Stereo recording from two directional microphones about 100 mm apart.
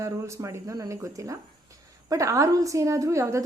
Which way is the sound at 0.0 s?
30° right (ahead or behind).